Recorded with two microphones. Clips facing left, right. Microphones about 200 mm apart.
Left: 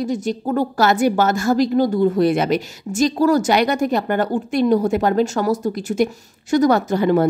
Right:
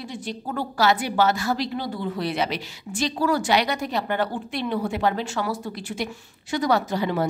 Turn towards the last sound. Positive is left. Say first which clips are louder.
# left 8 dB
turn(degrees=50)  # may be behind; listen again after turning